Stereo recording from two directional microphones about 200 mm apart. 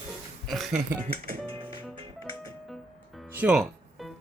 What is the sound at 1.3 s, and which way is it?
Music, 10° left (ahead or behind).